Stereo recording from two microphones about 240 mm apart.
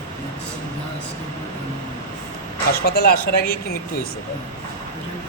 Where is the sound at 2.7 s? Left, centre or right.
Left.